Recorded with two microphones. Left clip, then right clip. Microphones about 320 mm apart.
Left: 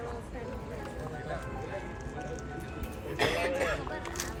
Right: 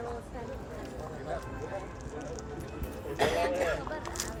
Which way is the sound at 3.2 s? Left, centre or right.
Right.